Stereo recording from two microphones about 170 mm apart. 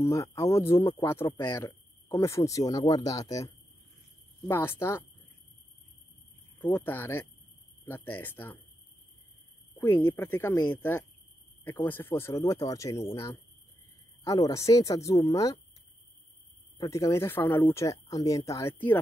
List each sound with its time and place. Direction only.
0.0 s speech: 15° left (ahead or behind)
4.5 s speech: 15° left (ahead or behind)
6.6 s speech: 10° left (ahead or behind)
9.8 s speech: 10° left (ahead or behind)
14.2 s speech: 20° left (ahead or behind)
16.7 s speech: 20° left (ahead or behind)